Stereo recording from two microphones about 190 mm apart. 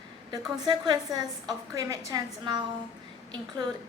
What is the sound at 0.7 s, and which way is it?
A woman's voice, 20° right (ahead or behind).